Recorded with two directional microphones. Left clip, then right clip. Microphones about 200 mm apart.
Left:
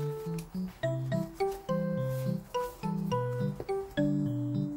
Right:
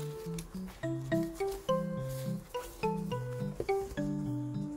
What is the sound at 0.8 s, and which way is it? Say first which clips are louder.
Music: even; centre (ahead or behind).